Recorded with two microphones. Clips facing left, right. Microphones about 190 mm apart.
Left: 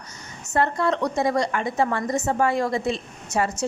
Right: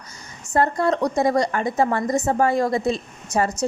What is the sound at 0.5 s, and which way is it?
A woman's voice, 40° right (ahead or behind).